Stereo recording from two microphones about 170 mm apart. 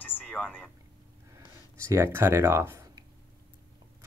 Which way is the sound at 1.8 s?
15° right (ahead or behind).